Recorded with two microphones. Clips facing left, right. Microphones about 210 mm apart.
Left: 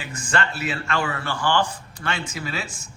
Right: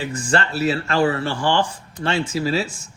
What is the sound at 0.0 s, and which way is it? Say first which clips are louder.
Speech: right 4 dB; 35° right (ahead or behind).